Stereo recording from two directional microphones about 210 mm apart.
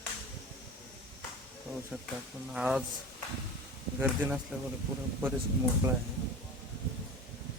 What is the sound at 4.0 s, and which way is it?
Speech, 5° right (ahead or behind).